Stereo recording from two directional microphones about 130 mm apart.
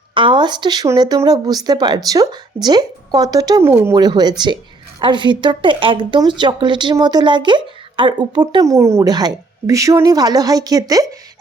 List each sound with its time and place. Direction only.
0.1 s speech: 40° right (ahead or behind); by 3.9 s 20° right (ahead or behind)
3.9 s speech: 30° right (ahead or behind)